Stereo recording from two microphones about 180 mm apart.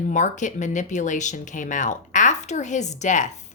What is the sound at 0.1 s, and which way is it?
A woman's voice, 45° left (ahead or behind).